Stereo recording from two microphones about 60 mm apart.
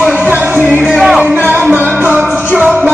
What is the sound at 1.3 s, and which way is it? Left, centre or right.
Music, right.